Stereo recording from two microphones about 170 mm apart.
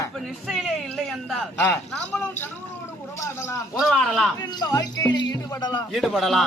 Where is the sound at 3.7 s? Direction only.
5° left (ahead or behind).